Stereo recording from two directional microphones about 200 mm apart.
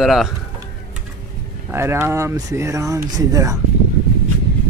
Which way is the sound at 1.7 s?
10° right (ahead or behind).